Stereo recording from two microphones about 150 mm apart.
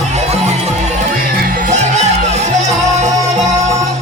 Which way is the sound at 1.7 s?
50° right (ahead or behind).